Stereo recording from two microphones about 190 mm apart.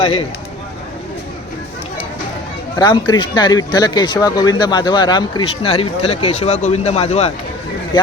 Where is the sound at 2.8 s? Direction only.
20° left (ahead or behind).